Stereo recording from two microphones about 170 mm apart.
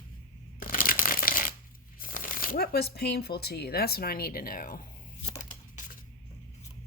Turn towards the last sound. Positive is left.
turn(degrees=50)  # may be behind; listen again after turning